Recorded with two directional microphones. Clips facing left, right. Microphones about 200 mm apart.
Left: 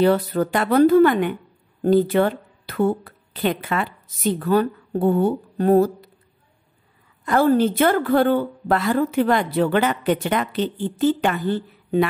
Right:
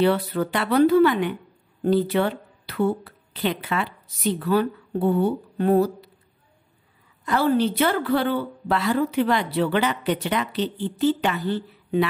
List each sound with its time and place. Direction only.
0.0 s a woman's voice: 45° left (ahead or behind)
7.2 s a woman's voice: 50° left (ahead or behind)